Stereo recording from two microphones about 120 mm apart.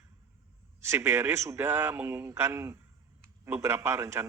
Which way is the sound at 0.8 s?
20° right (ahead or behind).